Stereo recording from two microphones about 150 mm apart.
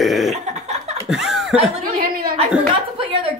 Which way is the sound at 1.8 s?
75° right (ahead or behind).